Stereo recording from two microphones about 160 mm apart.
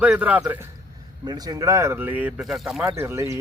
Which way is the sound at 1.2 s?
25° right (ahead or behind).